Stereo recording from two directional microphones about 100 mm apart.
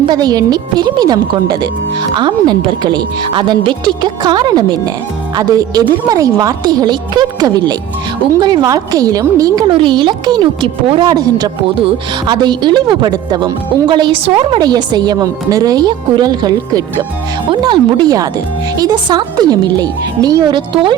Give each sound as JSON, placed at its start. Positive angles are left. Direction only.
{"t": 0.1, "sound": "a woman's voice", "side_deg": -40}
{"t": 9.6, "sound": "a woman's voice", "side_deg": -55}